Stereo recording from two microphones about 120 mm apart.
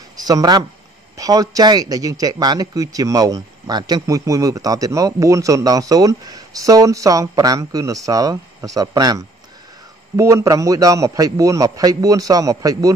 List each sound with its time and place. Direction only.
0.2 s a man's voice: 30° right (ahead or behind)